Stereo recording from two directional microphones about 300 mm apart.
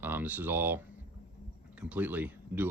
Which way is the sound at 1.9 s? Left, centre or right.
Centre.